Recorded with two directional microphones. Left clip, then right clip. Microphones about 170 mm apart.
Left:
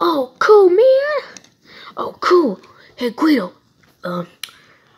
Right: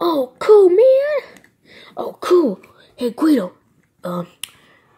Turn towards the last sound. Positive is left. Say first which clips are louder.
# left 1 dB
turn(degrees=-5)  # may be behind; listen again after turning